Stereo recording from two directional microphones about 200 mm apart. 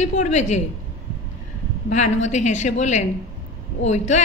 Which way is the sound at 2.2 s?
35° left (ahead or behind).